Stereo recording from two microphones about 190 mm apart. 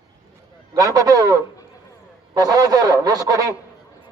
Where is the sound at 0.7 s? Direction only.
20° right (ahead or behind).